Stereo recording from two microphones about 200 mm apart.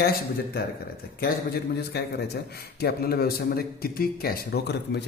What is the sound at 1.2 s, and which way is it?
A man's voice, 50° left (ahead or behind).